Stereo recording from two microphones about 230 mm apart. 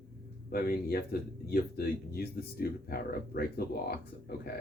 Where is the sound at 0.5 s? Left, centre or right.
Left.